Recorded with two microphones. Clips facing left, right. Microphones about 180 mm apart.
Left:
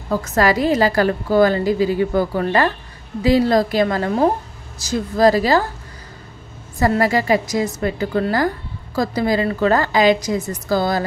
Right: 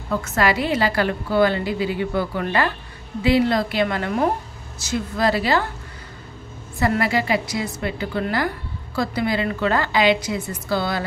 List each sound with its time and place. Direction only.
0.1 s a woman's voice: 40° left (ahead or behind)
6.8 s a woman's voice: 40° left (ahead or behind)